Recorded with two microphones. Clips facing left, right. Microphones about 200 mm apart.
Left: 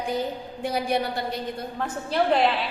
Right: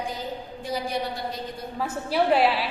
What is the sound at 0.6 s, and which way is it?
Speech, 65° left (ahead or behind).